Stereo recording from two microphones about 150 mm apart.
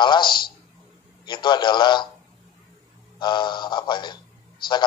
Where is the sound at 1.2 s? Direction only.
30° left (ahead or behind).